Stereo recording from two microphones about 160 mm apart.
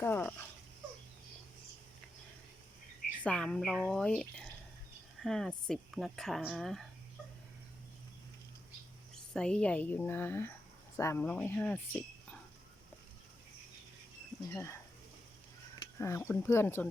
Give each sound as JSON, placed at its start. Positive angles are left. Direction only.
{"t": 0.0, "sound": "speech", "side_deg": 15}
{"t": 3.2, "sound": "speech", "side_deg": 5}
{"t": 9.1, "sound": "speech", "side_deg": 5}
{"t": 14.5, "sound": "speech", "side_deg": 15}
{"t": 16.0, "sound": "speech", "side_deg": 15}